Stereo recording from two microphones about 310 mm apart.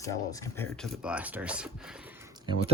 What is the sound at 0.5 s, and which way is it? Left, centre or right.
Speech, centre.